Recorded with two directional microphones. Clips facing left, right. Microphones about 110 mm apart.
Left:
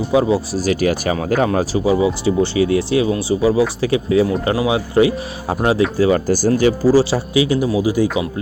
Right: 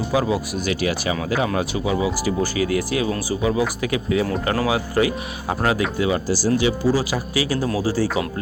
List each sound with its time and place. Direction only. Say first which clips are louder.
0.1 s speech: left 6 dB; 30° left (ahead or behind)
4.3 s speech: left 4 dB; 15° left (ahead or behind); by 6.1 s 35° left (ahead or behind)
6.1 s speech: left 5 dB; 50° left (ahead or behind)
6.9 s speech: left 8 dB; 30° left (ahead or behind)